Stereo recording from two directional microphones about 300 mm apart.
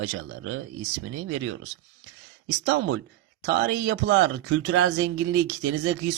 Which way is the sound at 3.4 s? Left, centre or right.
Right.